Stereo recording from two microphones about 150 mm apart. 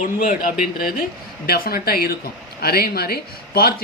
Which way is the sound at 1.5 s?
90° left.